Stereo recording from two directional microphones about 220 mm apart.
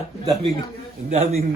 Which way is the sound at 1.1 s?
30° right (ahead or behind).